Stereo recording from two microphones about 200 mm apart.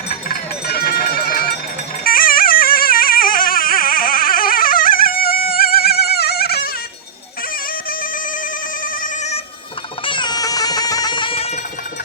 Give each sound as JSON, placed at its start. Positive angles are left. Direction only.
{"t": 0.1, "sound": "goat", "side_deg": 50}
{"t": 2.0, "sound": "music", "side_deg": 45}
{"t": 7.9, "sound": "bagpipes", "side_deg": 45}
{"t": 8.8, "sound": "telephone", "side_deg": 40}
{"t": 10.1, "sound": "music", "side_deg": 20}